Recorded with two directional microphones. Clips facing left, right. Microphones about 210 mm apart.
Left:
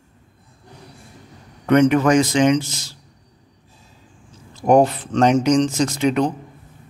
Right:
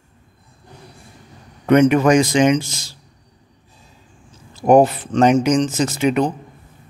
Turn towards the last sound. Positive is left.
turn(degrees=-5)  # may be behind; listen again after turning